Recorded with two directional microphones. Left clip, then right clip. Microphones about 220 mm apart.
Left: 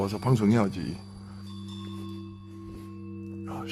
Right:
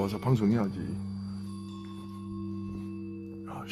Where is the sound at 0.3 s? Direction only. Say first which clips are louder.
Left 6 dB; 25° left (ahead or behind).